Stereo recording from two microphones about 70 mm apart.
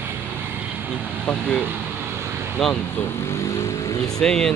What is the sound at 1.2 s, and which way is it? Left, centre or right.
Speech, centre.